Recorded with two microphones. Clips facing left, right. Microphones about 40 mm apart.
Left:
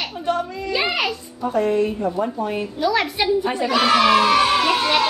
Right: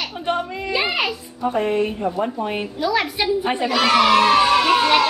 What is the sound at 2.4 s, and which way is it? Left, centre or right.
Speech, right.